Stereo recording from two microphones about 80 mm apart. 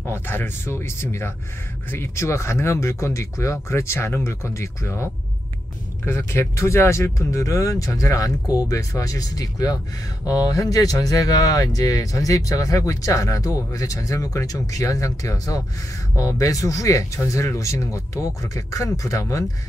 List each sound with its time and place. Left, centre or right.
0.0 s speech: left